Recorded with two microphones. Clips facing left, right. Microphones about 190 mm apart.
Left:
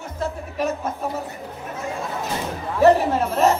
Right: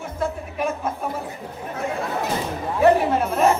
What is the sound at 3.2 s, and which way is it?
Chatter, 55° right (ahead or behind).